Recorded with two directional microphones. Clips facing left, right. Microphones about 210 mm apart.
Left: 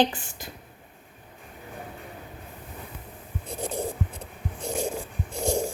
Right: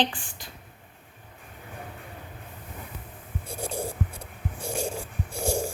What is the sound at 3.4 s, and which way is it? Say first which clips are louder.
Writing: left 2 dB; 20° left (ahead or behind).